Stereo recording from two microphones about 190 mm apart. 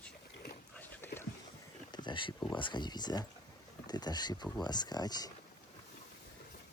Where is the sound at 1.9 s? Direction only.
25° left (ahead or behind).